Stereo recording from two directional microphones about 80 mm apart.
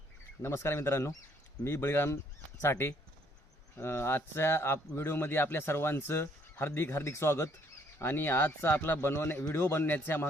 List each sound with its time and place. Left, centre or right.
0.4 s speech: left